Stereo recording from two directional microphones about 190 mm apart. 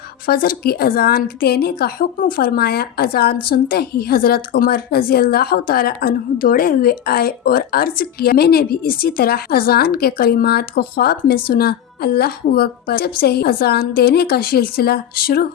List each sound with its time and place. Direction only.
0.3 s a woman's voice: 50° left (ahead or behind)